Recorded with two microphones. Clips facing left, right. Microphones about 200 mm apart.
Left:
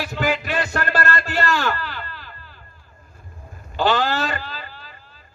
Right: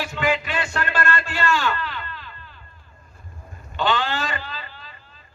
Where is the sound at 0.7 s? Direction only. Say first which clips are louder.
Even; 40° left (ahead or behind).